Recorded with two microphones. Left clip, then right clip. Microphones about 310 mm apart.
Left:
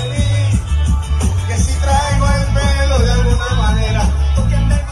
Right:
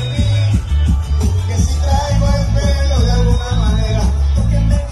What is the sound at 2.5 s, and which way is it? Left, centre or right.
Music, left.